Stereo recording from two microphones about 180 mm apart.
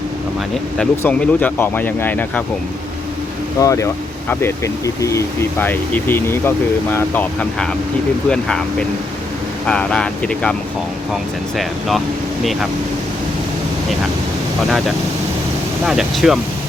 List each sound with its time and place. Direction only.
0.8 s speech: 5° left (ahead or behind)
3.6 s speech: 15° left (ahead or behind)
9.6 s speech: 5° left (ahead or behind)
15.9 s speech: 5° right (ahead or behind)